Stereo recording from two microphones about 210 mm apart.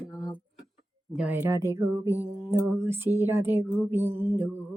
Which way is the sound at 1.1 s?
5° right (ahead or behind).